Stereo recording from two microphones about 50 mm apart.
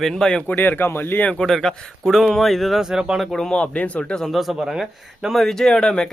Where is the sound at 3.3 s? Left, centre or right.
Centre.